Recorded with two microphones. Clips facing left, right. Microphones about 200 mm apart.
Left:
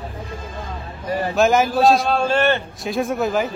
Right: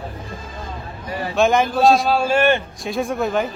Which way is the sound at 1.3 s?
Centre (ahead or behind).